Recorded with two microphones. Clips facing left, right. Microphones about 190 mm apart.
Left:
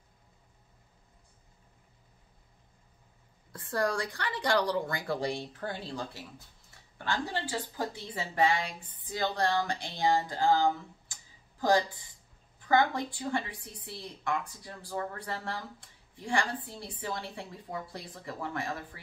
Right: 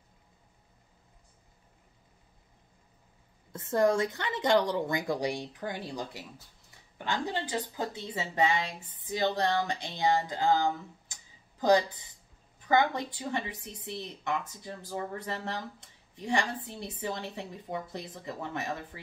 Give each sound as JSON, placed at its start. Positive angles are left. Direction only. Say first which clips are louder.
{"t": 3.5, "sound": "a woman's voice", "louder": "right 5 dB", "side_deg": -20}